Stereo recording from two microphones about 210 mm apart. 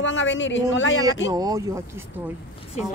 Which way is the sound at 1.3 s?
15° right (ahead or behind).